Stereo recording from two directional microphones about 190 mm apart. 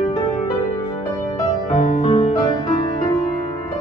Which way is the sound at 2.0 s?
30° left (ahead or behind).